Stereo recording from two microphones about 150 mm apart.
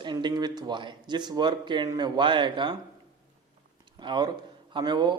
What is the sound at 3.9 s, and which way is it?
Speech, 30° right (ahead or behind).